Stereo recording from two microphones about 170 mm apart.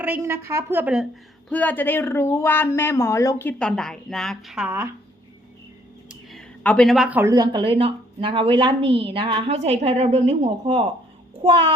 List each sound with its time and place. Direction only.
0.0 s a woman's voice: 15° right (ahead or behind)
1.5 s speech: 10° left (ahead or behind); by 4.9 s 10° right (ahead or behind)
6.6 s a child's voice: 5° left (ahead or behind); by 11.7 s 30° right (ahead or behind)